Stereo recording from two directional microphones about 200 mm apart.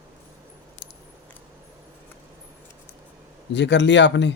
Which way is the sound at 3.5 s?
60° left (ahead or behind).